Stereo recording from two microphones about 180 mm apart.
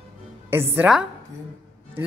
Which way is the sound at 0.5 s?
10° right (ahead or behind).